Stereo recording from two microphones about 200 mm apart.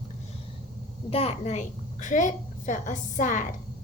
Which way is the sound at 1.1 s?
30° left (ahead or behind).